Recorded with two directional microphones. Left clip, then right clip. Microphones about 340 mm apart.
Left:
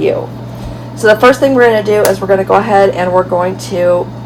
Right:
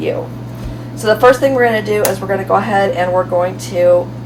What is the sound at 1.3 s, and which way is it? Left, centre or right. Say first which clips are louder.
Speech: left 3 dB; left.